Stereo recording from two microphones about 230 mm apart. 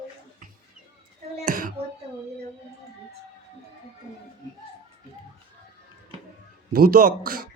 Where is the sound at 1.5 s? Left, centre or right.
Right.